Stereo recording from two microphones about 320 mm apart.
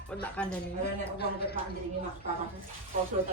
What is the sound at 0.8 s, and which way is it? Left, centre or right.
Speech, left.